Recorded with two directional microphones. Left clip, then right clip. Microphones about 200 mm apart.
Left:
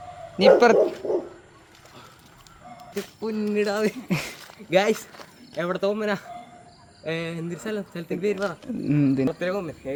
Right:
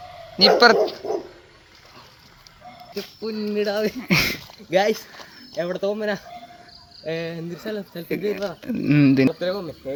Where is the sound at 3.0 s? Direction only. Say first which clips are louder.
Even; 10° left (ahead or behind).